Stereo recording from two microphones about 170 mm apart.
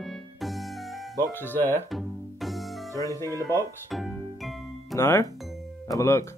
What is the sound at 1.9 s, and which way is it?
Music, centre (ahead or behind).